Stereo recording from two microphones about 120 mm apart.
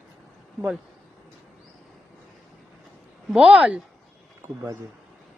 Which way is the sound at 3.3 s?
10° right (ahead or behind).